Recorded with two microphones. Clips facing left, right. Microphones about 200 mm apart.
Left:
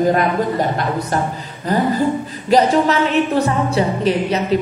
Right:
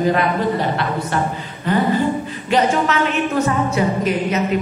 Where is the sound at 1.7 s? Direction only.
40° left (ahead or behind).